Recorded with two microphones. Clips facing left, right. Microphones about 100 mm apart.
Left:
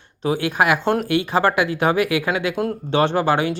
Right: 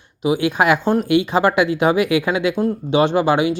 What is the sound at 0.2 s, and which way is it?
Speech, 15° right (ahead or behind).